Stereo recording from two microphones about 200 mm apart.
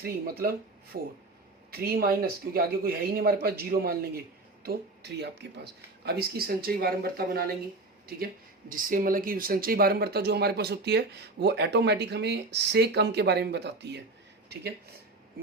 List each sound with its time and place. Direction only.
0.0 s speech: 50° right (ahead or behind)
8.7 s speech: 45° right (ahead or behind)